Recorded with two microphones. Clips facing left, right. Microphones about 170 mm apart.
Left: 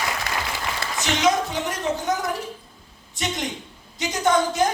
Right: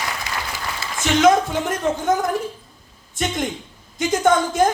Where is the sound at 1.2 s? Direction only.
50° right (ahead or behind).